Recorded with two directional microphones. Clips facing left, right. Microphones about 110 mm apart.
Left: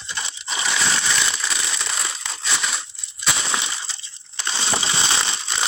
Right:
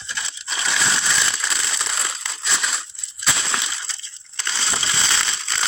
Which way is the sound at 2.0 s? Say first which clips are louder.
Even; centre (ahead or behind).